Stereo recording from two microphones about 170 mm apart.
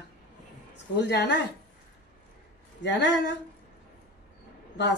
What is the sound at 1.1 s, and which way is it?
Speech, 75° left (ahead or behind).